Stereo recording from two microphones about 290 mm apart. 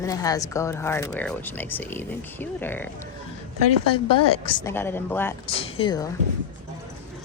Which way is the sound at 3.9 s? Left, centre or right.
Centre.